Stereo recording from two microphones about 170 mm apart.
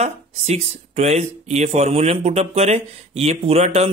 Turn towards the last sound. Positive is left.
turn(degrees=-35)  # may be behind; listen again after turning